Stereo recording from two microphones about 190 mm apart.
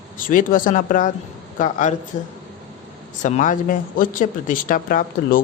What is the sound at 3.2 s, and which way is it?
Speech, 40° left (ahead or behind).